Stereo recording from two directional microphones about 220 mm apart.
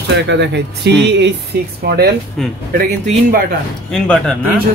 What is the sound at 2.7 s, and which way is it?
Speech, 40° right (ahead or behind).